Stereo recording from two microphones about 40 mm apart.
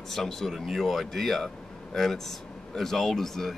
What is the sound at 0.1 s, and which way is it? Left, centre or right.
Speech, centre.